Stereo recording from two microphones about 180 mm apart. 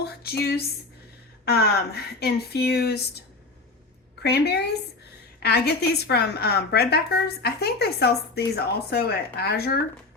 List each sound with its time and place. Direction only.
0.0 s a sound: 60° left (ahead or behind)
1.5 s a woman's voice: 60° left (ahead or behind)
4.2 s a woman's voice: 65° left (ahead or behind)